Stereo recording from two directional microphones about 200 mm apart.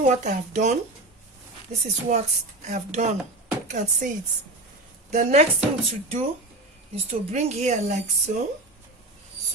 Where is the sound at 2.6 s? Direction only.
35° right (ahead or behind).